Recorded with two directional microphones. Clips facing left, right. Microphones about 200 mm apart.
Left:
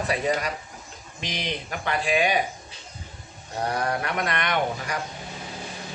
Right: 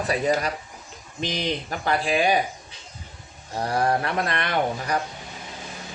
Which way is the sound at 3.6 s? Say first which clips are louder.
Right 4 dB; 30° right (ahead or behind).